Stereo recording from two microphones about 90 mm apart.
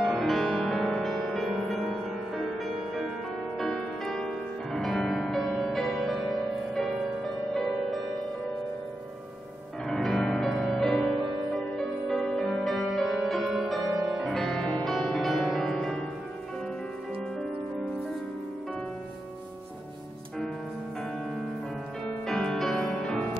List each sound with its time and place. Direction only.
0.0 s music: 5° left (ahead or behind)
9.8 s music: 5° left (ahead or behind)
22.0 s music: 5° left (ahead or behind)